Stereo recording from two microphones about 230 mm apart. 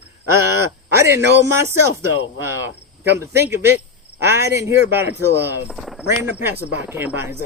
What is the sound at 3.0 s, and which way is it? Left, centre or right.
Speech, centre.